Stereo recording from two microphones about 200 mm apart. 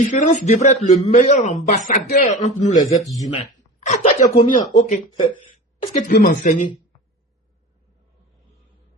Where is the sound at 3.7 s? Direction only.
35° left (ahead or behind).